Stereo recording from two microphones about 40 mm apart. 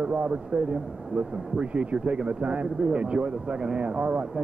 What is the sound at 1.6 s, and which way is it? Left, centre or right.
Speech, right.